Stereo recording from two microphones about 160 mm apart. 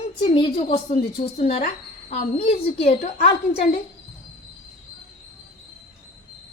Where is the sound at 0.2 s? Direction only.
30° left (ahead or behind).